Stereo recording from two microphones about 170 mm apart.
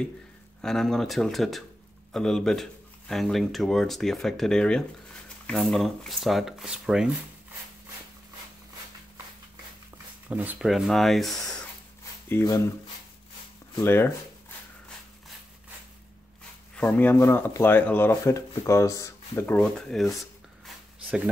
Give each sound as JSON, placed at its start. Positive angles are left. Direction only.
{"t": 0.6, "sound": "a man's voice", "side_deg": 0}
{"t": 10.2, "sound": "a man's voice", "side_deg": -10}
{"t": 12.0, "sound": "a sound", "side_deg": 15}
{"t": 13.7, "sound": "speech", "side_deg": 15}
{"t": 16.7, "sound": "speech", "side_deg": 10}